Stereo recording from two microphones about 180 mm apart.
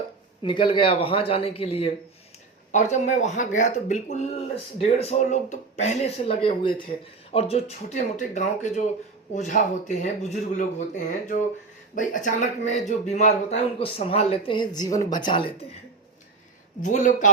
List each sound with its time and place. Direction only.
0.4 s speech: 25° left (ahead or behind)
16.8 s speech: 45° left (ahead or behind)